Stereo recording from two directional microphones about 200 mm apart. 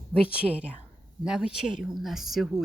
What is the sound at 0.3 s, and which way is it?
A woman's voice, 5° right (ahead or behind).